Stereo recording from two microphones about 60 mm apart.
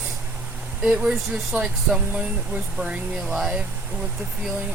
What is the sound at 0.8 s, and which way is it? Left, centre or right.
Speech, centre.